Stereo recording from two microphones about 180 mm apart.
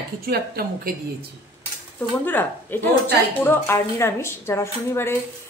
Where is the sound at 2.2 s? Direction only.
10° left (ahead or behind).